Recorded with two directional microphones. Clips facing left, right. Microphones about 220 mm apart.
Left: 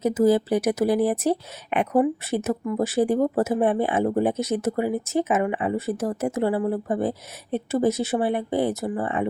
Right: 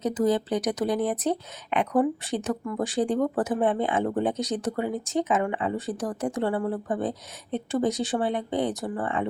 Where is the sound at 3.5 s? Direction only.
15° left (ahead or behind).